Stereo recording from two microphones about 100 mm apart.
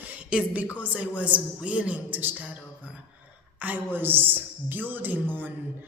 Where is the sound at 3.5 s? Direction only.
15° right (ahead or behind).